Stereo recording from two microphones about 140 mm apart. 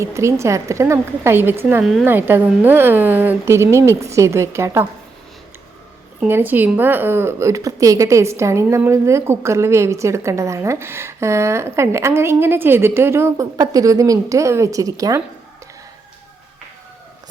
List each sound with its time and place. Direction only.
0.0 s speech: 20° right (ahead or behind)
1.8 s speech: centre (ahead or behind)
2.0 s speech: 15° right (ahead or behind)
6.1 s speech: 15° right (ahead or behind)